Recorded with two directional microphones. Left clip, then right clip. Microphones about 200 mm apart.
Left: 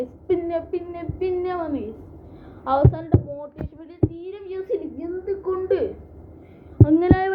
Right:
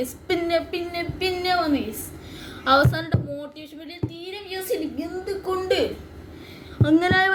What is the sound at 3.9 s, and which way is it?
A woman's voice, 10° right (ahead or behind).